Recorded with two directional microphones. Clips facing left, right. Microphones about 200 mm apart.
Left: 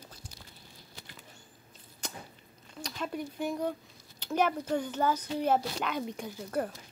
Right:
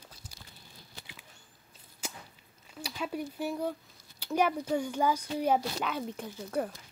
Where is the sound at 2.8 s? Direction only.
5° right (ahead or behind).